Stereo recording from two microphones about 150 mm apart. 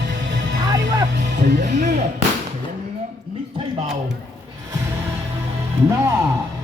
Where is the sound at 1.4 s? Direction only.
60° right (ahead or behind).